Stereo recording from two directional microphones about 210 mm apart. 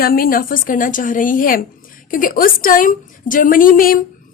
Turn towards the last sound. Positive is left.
turn(degrees=40)  # may be behind; listen again after turning